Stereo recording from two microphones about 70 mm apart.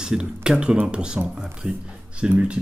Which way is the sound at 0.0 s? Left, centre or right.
Centre.